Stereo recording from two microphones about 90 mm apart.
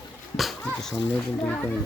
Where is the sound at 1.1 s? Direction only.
15° left (ahead or behind).